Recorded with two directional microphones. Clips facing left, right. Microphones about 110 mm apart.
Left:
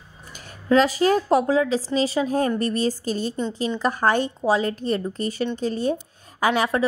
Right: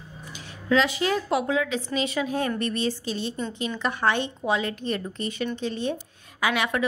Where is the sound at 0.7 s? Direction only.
40° left (ahead or behind).